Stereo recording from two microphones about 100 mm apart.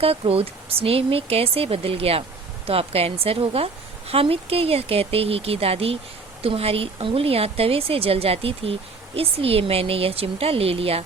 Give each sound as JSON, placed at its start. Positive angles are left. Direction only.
{"t": 0.0, "sound": "speech", "side_deg": -75}